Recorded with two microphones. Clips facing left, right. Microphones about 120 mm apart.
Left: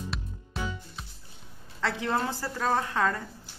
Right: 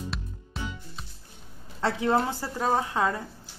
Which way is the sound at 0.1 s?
Centre (ahead or behind).